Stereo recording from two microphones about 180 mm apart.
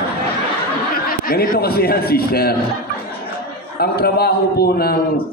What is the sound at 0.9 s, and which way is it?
A man's voice, 55° left (ahead or behind).